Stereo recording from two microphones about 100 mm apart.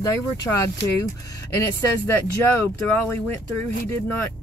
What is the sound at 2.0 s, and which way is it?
Speech, 25° left (ahead or behind).